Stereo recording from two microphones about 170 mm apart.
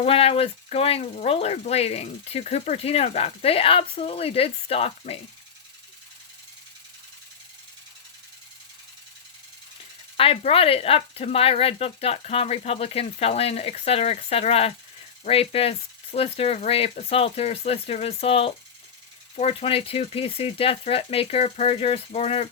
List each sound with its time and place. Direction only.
0.0 s speech: 35° left (ahead or behind)
10.2 s speech: 35° left (ahead or behind)